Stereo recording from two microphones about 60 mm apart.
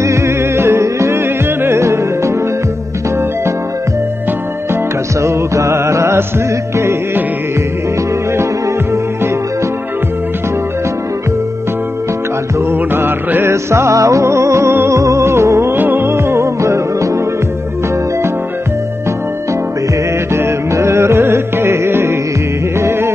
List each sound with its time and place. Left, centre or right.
0.0 s music: right
5.2 s music: right
12.7 s music: right
15.7 s music: right
16.1 s music: right
20.3 s music: right